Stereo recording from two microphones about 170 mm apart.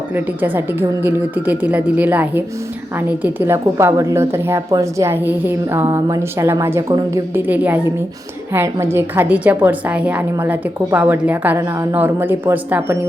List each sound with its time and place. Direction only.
0.4 s a woman's voice: 10° right (ahead or behind)